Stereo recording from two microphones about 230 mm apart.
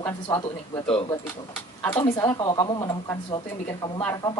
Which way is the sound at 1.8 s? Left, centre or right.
Centre.